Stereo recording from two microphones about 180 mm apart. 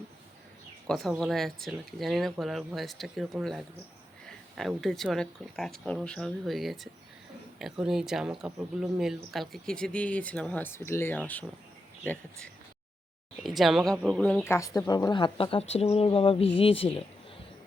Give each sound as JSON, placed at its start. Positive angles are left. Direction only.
{"t": 0.9, "sound": "speech", "side_deg": 0}
{"t": 13.4, "sound": "speech", "side_deg": 0}